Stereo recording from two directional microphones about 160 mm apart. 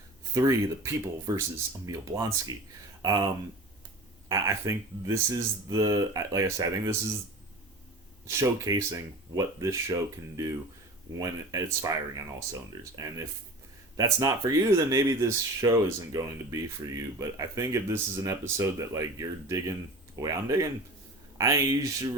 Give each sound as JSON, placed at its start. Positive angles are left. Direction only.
{"t": 0.3, "sound": "speech", "side_deg": -20}
{"t": 4.3, "sound": "speech", "side_deg": -20}
{"t": 8.3, "sound": "speech", "side_deg": -15}